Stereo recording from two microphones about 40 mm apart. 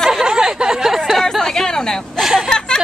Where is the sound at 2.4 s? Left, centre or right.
Centre.